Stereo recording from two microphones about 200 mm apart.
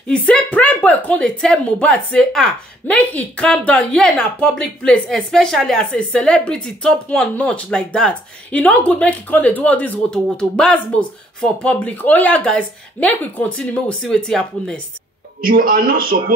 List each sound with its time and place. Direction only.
0.3 s speech: 5° left (ahead or behind)
15.4 s a man's voice: 45° right (ahead or behind)